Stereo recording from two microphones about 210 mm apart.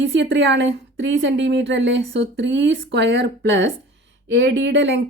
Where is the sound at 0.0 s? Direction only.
60° right (ahead or behind).